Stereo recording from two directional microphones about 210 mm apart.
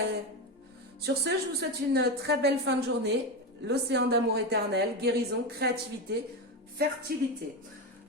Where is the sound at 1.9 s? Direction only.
50° right (ahead or behind).